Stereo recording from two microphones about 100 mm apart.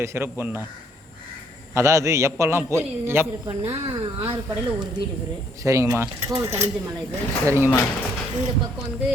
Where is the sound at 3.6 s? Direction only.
80° right.